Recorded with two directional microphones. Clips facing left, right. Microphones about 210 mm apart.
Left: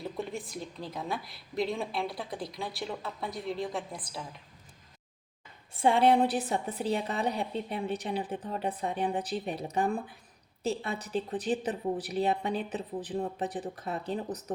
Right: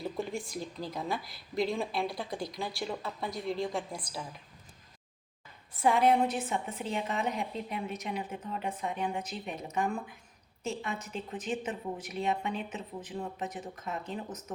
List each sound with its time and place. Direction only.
0.0 s a woman's voice: centre (ahead or behind)
5.7 s a woman's voice: 30° left (ahead or behind)